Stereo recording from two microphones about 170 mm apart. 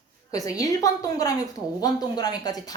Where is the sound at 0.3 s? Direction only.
20° left (ahead or behind).